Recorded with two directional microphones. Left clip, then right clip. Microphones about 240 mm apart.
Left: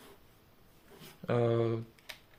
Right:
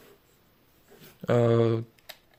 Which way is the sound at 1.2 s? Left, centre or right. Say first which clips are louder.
Right 7 dB; right.